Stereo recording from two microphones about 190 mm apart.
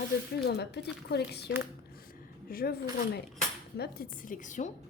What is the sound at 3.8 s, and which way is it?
Speech, 50° left (ahead or behind).